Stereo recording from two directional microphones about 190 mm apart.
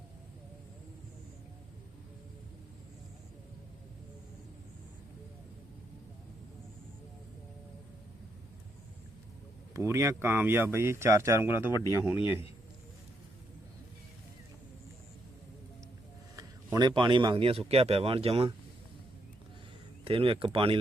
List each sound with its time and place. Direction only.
9.7 s speech: 15° right (ahead or behind)
16.3 s a man's voice: 20° right (ahead or behind)
20.1 s speech: 30° right (ahead or behind)